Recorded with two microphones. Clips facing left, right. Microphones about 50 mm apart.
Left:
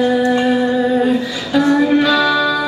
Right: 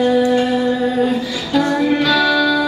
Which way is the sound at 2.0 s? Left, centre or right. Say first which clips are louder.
Left 1 dB; centre.